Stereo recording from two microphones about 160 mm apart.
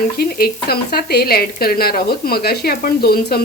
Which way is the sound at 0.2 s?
70° left (ahead or behind).